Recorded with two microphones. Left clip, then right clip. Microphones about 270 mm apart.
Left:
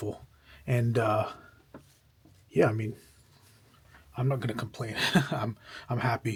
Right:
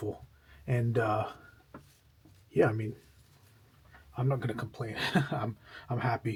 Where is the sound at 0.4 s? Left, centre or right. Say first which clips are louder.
Left 3 dB; centre.